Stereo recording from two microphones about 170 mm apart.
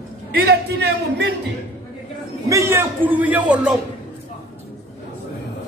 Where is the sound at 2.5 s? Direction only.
15° right (ahead or behind).